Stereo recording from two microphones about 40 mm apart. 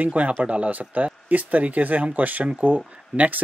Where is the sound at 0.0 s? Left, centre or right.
Right.